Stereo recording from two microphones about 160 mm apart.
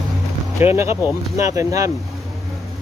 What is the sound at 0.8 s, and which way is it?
Speech, 20° right (ahead or behind).